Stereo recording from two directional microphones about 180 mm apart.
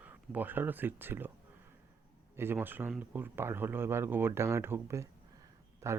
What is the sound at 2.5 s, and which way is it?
Speech, 10° right (ahead or behind).